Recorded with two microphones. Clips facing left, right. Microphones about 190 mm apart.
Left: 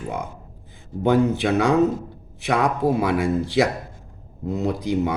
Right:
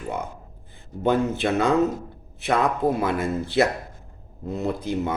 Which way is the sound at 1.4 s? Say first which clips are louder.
Left 2 dB; 15° left (ahead or behind).